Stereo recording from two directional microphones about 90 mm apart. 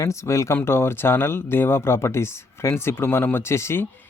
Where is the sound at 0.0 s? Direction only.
35° left (ahead or behind).